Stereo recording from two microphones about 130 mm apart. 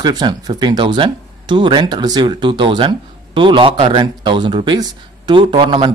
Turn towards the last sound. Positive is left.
turn(degrees=-40)  # may be behind; listen again after turning